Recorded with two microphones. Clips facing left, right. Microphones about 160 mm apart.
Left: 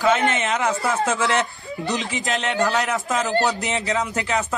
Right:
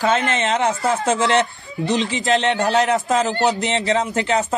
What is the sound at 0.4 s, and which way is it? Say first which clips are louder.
Speech: right 3 dB; 30° right (ahead or behind).